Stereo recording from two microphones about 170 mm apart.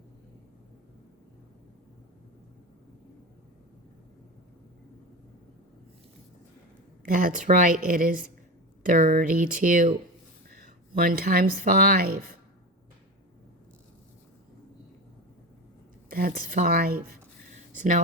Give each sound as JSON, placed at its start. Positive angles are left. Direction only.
{"t": 7.0, "sound": "a woman's voice", "side_deg": -55}
{"t": 16.0, "sound": "speech", "side_deg": -55}